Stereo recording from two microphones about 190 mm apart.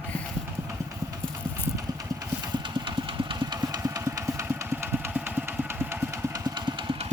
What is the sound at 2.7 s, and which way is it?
Engine, 25° right (ahead or behind).